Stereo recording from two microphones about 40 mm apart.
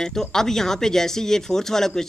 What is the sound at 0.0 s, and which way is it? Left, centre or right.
Speech, centre.